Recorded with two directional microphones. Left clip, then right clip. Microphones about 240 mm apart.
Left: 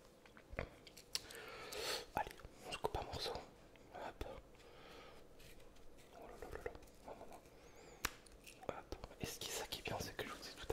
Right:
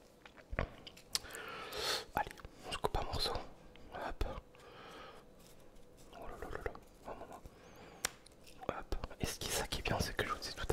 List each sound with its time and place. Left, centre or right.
0.6 s a sound: right
3.9 s whispering: right
6.1 s pig: right
8.6 s whispering: right